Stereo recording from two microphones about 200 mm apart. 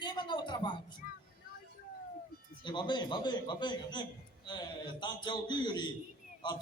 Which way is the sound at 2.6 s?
20° left (ahead or behind).